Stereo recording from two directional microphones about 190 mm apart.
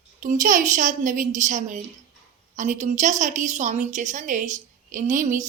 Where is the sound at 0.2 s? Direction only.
45° right (ahead or behind).